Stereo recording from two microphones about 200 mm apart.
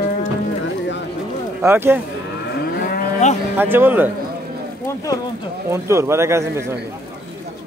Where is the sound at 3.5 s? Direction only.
10° right (ahead or behind).